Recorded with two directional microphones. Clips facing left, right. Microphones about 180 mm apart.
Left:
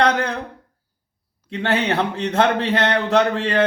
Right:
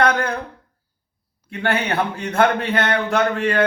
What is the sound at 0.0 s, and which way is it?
Speech, 20° left (ahead or behind).